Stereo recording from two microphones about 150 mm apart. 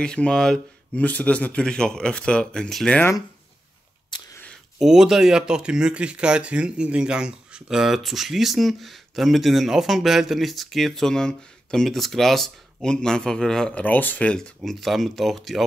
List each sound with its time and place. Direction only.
0.0 s speech: 5° left (ahead or behind)
4.1 s a sound: 30° left (ahead or behind)
4.7 s speech: 5° right (ahead or behind)